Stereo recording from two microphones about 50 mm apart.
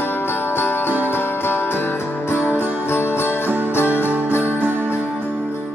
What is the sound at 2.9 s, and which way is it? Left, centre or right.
Music, left.